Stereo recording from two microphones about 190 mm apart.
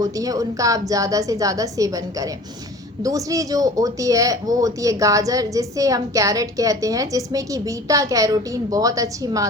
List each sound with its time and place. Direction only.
0.0 s speech: 20° right (ahead or behind)